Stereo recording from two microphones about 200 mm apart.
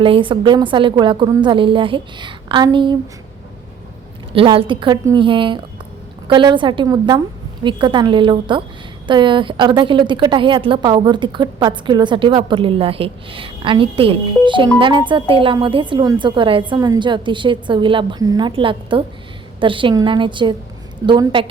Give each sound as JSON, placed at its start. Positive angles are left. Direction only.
{"t": 0.0, "sound": "a woman's voice", "side_deg": -25}
{"t": 4.3, "sound": "a woman's voice", "side_deg": -25}